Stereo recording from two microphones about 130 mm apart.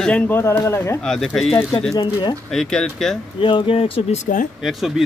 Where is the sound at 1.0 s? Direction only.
5° left (ahead or behind).